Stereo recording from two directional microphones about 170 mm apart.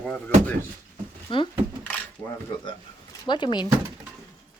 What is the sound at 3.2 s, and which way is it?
Speech, 25° left (ahead or behind).